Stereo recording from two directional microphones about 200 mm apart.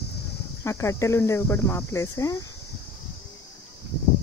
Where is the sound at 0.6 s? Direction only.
15° left (ahead or behind).